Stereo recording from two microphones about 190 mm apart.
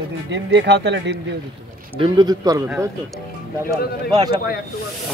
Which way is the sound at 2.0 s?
20° right (ahead or behind).